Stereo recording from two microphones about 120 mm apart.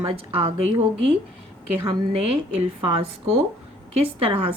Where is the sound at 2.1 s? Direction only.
55° right (ahead or behind).